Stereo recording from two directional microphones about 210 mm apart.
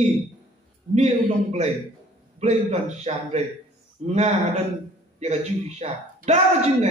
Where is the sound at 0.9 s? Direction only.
30° right (ahead or behind).